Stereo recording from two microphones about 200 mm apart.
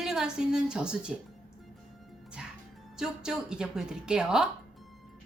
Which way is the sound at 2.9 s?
5° right (ahead or behind).